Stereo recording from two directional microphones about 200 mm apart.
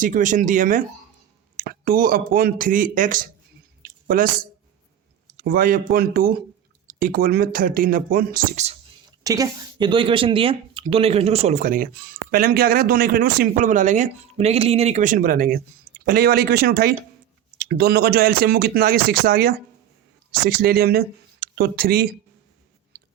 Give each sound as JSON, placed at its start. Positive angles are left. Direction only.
{"t": 0.0, "sound": "speech", "side_deg": -40}
{"t": 3.8, "sound": "a sound", "side_deg": -45}
{"t": 5.4, "sound": "speech", "side_deg": -45}
{"t": 9.2, "sound": "speech", "side_deg": -15}
{"t": 22.9, "sound": "chewing", "side_deg": -50}